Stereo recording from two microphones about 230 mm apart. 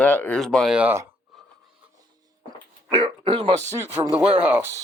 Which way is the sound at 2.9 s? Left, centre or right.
Right.